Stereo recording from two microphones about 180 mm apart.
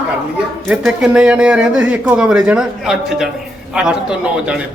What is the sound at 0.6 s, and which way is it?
A man's voice, centre (ahead or behind).